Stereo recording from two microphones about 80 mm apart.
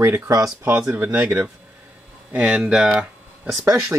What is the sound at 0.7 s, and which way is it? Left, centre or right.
Speech, centre.